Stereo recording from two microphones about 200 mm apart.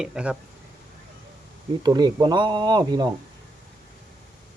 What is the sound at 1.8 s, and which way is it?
Speech, 20° right (ahead or behind).